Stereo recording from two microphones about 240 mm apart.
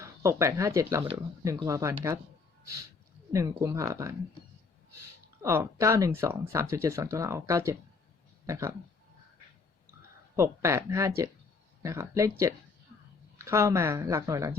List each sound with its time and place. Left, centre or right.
0.0 s speech: centre
3.3 s speech: centre
5.4 s speech: centre
10.3 s speech: centre